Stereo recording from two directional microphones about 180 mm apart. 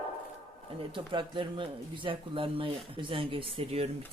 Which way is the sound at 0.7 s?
25° right (ahead or behind).